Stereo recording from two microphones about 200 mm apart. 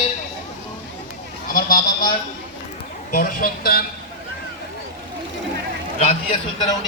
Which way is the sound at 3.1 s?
45° left (ahead or behind).